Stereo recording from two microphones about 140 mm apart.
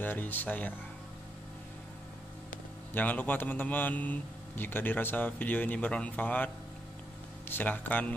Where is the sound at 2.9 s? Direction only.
10° left (ahead or behind).